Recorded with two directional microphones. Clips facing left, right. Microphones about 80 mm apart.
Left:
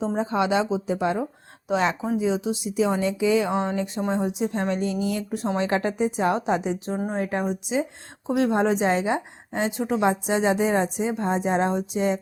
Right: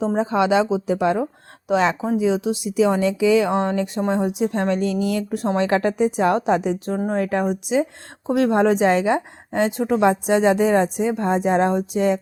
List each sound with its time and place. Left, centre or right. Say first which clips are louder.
0.2 s speech: right 5 dB; right
2.1 s speech: right 4 dB; right
7.1 s a woman's voice: right 6 dB; right